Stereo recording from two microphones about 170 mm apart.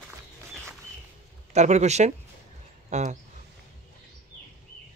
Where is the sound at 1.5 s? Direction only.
40° right (ahead or behind).